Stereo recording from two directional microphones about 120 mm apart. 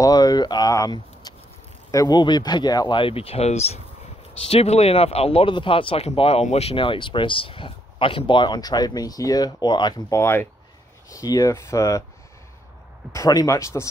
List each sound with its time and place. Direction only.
0.0 s speech: 30° left (ahead or behind)
3.0 s speech: 50° left (ahead or behind); by 12.0 s 25° left (ahead or behind)
13.1 s speech: 30° left (ahead or behind)